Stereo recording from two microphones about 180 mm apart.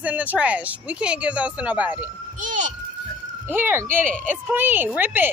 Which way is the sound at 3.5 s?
10° right (ahead or behind).